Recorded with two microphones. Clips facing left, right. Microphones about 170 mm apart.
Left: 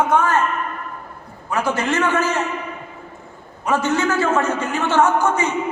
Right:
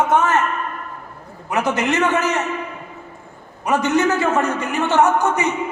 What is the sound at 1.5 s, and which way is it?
Speech, 20° right (ahead or behind).